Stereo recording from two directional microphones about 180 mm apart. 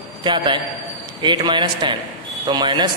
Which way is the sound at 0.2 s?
25° right (ahead or behind).